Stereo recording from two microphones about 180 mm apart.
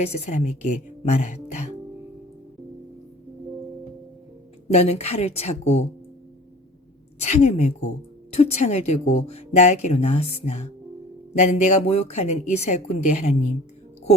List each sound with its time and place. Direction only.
0.0 s speech: 40° left (ahead or behind)
4.7 s speech: 35° left (ahead or behind)
7.2 s speech: 40° left (ahead or behind)